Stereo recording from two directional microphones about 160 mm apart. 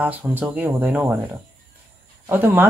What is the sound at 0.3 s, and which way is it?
Speech, 10° right (ahead or behind).